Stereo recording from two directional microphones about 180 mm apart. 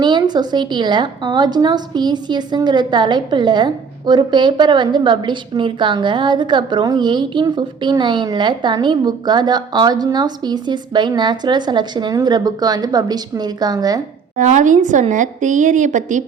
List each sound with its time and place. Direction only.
0.0 s a woman's voice: 25° right (ahead or behind)
14.3 s a woman's voice: 45° right (ahead or behind)